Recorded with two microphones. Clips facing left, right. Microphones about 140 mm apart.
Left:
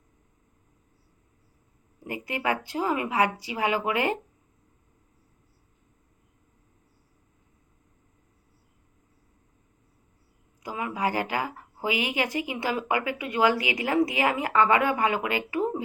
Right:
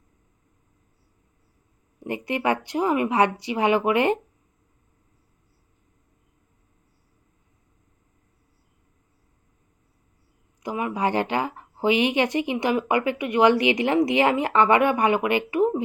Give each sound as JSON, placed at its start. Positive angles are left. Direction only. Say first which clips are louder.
{"t": 2.0, "sound": "a woman's voice", "louder": "right 5 dB", "side_deg": -25}
{"t": 10.6, "sound": "a woman's voice", "louder": "right 4 dB", "side_deg": -25}